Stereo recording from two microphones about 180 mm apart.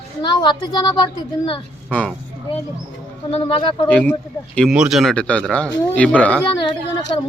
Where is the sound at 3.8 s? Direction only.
10° left (ahead or behind).